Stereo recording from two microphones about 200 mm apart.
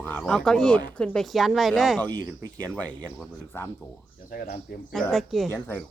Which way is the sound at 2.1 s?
20° right (ahead or behind).